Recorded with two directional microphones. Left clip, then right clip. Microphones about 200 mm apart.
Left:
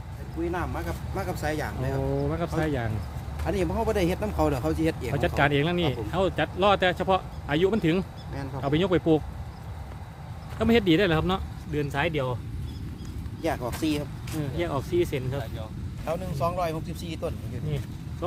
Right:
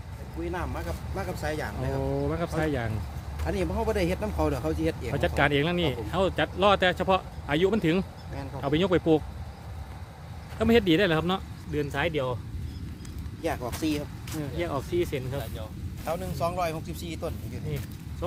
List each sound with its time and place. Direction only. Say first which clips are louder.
0.5 s speech: left 2 dB; 15° left (ahead or behind)
2.0 s speech: left 1 dB; 10° right (ahead or behind)
3.4 s speech: left 2 dB; 15° left (ahead or behind)
5.1 s speech: even; 10° right (ahead or behind)
10.6 s speech: even; 5° right (ahead or behind)
13.4 s speech: left 2 dB; 10° left (ahead or behind)
16.0 s speech: left 1 dB; 35° right (ahead or behind)